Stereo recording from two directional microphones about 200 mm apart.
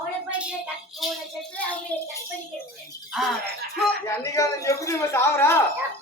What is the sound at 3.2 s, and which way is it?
Speech, centre (ahead or behind).